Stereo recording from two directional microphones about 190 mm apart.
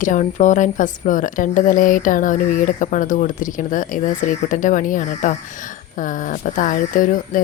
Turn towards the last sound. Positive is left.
turn(degrees=45)  # may be behind; listen again after turning